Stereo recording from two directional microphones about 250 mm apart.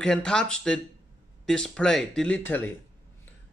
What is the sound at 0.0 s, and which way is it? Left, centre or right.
Speech, centre.